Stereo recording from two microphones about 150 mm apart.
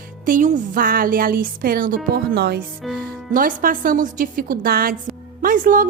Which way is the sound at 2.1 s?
90° right.